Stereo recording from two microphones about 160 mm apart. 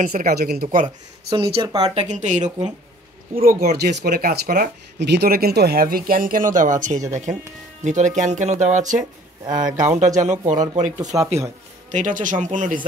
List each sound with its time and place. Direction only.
0.0 s speech: 60° right (ahead or behind)
1.3 s speech: 25° right (ahead or behind)
2.0 s speech: 50° right (ahead or behind)
3.3 s speech: 65° right (ahead or behind)
9.5 s speech: 25° right (ahead or behind)
10.1 s speech: 50° right (ahead or behind)
11.0 s speech: 20° right (ahead or behind)
11.9 s speech: 50° right (ahead or behind)